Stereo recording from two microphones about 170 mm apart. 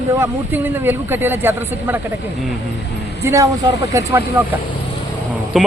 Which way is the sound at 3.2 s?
20° right (ahead or behind).